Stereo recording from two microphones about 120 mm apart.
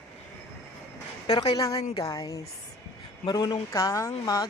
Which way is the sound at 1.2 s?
35° left (ahead or behind).